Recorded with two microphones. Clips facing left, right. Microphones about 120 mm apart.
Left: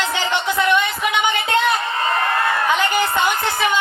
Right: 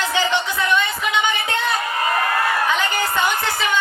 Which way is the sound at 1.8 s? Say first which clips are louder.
Even; 30° left (ahead or behind).